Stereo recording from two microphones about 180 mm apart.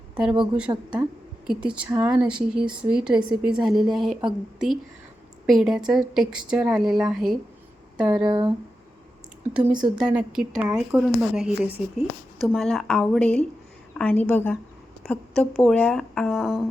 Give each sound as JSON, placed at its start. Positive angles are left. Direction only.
{"t": 0.1, "sound": "a woman's voice", "side_deg": -5}
{"t": 0.7, "sound": "speech", "side_deg": -25}
{"t": 1.5, "sound": "speech", "side_deg": -5}
{"t": 8.2, "sound": "speech", "side_deg": -25}
{"t": 9.5, "sound": "speech", "side_deg": -5}
{"t": 9.7, "sound": "speech", "side_deg": -25}
{"t": 10.0, "sound": "a woman's voice", "side_deg": -5}